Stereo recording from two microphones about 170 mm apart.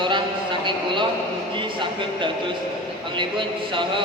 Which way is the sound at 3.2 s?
30° right (ahead or behind).